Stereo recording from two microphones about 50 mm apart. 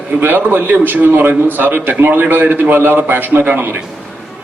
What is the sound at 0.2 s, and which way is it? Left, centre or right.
A man's voice, right.